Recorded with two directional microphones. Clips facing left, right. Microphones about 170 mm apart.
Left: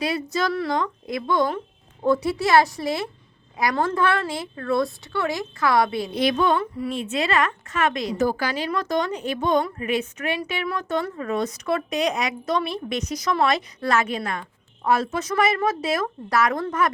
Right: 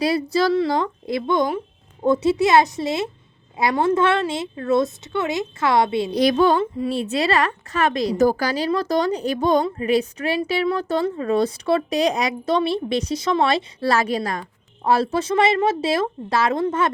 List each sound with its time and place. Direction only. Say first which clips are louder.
0.0 s a woman's voice: right 5 dB; 35° right (ahead or behind)
1.4 s a woman's voice: right 2 dB; 10° right (ahead or behind)
6.1 s a woman's voice: right 4 dB; 40° right (ahead or behind)